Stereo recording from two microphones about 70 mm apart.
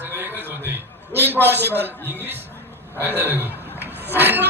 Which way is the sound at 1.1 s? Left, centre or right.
Right.